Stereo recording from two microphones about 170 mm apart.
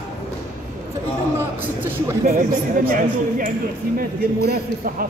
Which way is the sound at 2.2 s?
55° right (ahead or behind).